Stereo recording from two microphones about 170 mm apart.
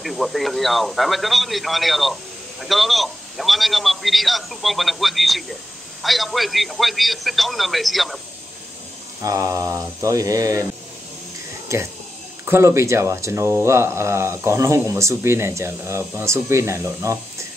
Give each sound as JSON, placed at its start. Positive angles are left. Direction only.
{"t": 0.0, "sound": "a man's voice", "side_deg": 0}
{"t": 9.2, "sound": "speech", "side_deg": -20}
{"t": 12.4, "sound": "speech", "side_deg": -15}